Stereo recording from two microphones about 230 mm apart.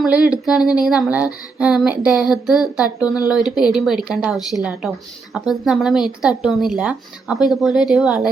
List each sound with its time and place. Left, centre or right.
0.0 s speech: centre
3.0 s speech: centre
3.2 s speech: centre